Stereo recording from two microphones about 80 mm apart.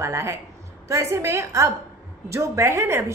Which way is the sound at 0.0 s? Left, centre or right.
Right.